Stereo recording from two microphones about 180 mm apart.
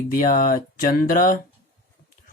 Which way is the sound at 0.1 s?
50° left (ahead or behind).